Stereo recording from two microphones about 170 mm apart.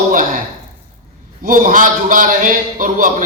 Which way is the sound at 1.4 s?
55° right (ahead or behind).